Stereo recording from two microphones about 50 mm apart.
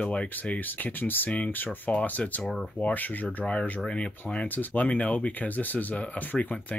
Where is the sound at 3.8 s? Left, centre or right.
Left.